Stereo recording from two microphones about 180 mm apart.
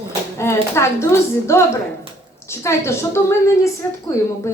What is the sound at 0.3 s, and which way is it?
A woman's voice, 15° left (ahead or behind).